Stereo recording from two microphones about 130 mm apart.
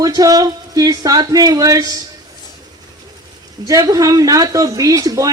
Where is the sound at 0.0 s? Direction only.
30° right (ahead or behind).